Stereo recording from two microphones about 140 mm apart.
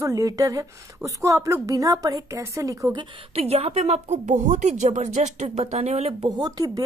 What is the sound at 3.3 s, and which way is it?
A woman's voice, 50° right (ahead or behind).